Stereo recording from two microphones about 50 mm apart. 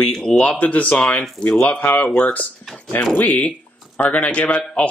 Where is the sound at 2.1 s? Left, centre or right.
Left.